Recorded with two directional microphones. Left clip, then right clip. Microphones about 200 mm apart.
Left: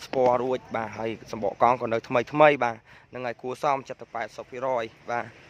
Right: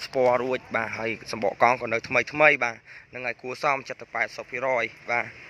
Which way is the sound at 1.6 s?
20° left (ahead or behind).